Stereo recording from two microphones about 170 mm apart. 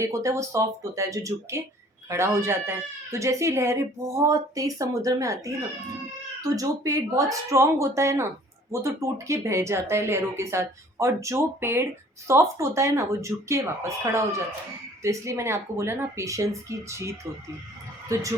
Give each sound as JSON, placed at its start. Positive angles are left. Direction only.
{"t": 0.0, "sound": "speech", "side_deg": -20}
{"t": 6.4, "sound": "speech", "side_deg": -20}